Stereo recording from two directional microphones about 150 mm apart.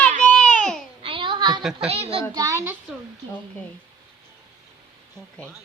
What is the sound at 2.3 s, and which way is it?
Speech, 20° right (ahead or behind).